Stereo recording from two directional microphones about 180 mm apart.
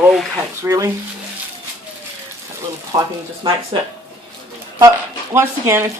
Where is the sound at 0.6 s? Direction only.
15° right (ahead or behind).